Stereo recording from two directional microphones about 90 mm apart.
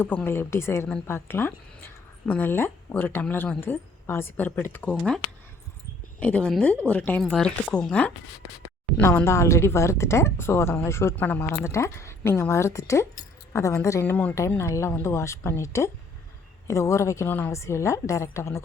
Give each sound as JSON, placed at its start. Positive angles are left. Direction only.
{"t": 0.3, "sound": "a woman's voice", "side_deg": 25}
{"t": 9.0, "sound": "a woman's voice", "side_deg": 30}
{"t": 14.0, "sound": "a woman's voice", "side_deg": 20}
{"t": 14.6, "sound": "a woman's voice", "side_deg": 30}